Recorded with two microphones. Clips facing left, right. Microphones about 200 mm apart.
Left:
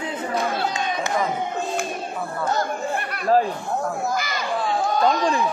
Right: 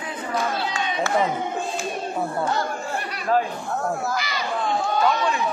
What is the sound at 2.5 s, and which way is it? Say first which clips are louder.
Chatter: left 2 dB; 55° left (ahead or behind).